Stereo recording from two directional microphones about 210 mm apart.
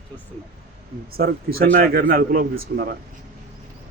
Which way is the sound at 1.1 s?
45° right (ahead or behind).